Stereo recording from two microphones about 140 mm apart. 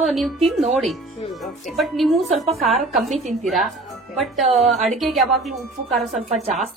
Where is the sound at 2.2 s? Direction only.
50° right (ahead or behind).